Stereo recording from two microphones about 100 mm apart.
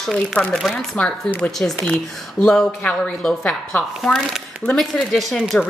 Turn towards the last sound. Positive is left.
turn(degrees=5)  # may be behind; listen again after turning